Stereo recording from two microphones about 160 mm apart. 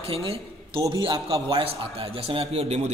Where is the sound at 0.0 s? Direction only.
35° right (ahead or behind).